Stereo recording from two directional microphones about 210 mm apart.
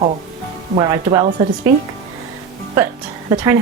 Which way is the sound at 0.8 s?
15° right (ahead or behind).